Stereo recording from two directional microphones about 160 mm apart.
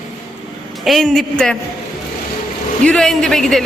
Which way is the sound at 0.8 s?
Centre (ahead or behind).